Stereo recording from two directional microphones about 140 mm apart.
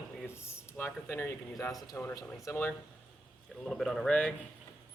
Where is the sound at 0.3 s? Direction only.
20° left (ahead or behind).